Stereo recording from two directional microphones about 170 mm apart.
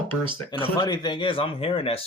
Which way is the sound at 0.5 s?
30° left (ahead or behind).